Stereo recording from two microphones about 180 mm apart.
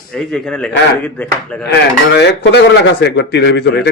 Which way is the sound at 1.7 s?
65° left (ahead or behind).